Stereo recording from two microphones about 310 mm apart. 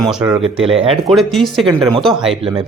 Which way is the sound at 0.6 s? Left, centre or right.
Centre.